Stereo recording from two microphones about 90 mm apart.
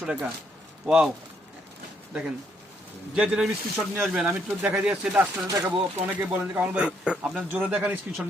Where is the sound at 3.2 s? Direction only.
5° right (ahead or behind).